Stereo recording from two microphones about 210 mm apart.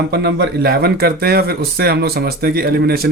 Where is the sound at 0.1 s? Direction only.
55° right (ahead or behind).